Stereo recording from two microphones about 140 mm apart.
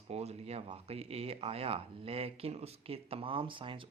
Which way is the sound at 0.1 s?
50° right (ahead or behind).